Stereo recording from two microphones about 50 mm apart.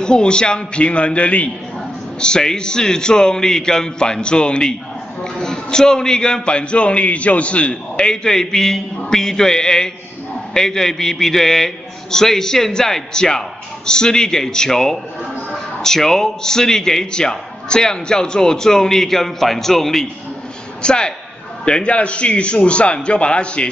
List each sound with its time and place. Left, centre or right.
0.0 s a man's voice: centre
2.1 s a man's voice: centre
20.8 s a man's voice: centre